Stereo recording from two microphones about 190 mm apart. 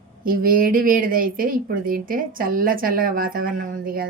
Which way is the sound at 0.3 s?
50° right (ahead or behind).